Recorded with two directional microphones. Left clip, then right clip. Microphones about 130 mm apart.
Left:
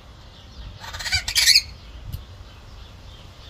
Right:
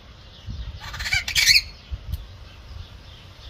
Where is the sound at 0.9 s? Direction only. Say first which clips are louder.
Even; 25° right (ahead or behind).